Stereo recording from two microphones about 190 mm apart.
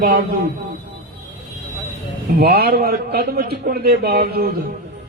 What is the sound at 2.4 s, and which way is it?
A man's voice, 55° right (ahead or behind).